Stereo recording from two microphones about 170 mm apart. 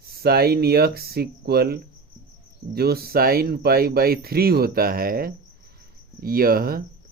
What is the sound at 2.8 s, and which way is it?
Speech, 65° right (ahead or behind).